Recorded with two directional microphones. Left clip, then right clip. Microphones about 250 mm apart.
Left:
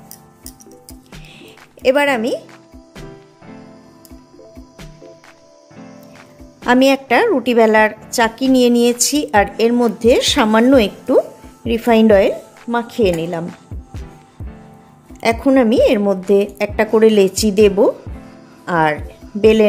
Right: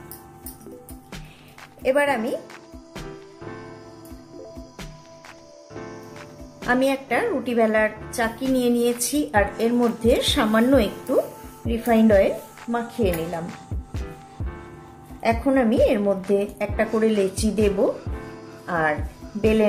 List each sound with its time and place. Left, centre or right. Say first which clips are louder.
1.8 s speech: left 6 dB; left
6.6 s speech: left 9 dB; left
15.1 s speech: left 7 dB; left